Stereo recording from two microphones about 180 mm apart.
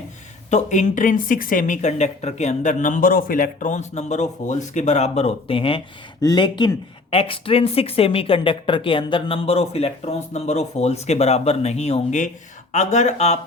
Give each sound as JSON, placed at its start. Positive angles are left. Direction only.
{"t": 0.5, "sound": "speech", "side_deg": 45}